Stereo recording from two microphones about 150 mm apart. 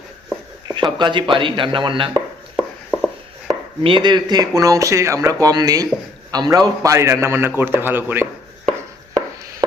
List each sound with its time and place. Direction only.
0.7 s speech: 30° right (ahead or behind)
2.6 s a sound: 5° right (ahead or behind)
3.8 s a man's voice: 30° right (ahead or behind); by 8.3 s 15° right (ahead or behind)